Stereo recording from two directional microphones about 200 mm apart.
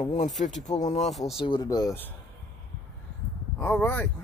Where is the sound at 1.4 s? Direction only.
20° left (ahead or behind).